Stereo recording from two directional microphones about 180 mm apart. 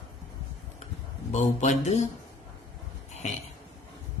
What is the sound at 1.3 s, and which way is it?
Speech, 40° left (ahead or behind).